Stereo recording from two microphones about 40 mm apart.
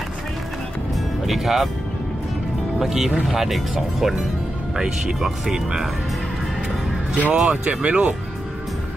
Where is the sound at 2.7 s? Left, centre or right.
Centre.